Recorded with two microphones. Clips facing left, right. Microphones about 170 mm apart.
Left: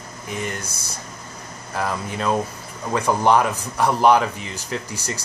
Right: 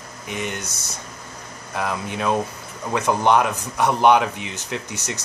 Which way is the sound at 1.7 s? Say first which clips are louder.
Even; centre (ahead or behind).